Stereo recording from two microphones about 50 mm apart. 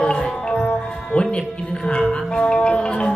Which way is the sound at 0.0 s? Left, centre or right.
Centre.